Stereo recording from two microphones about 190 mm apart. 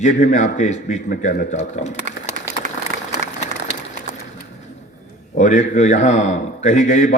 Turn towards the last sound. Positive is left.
turn(degrees=40)  # may be behind; listen again after turning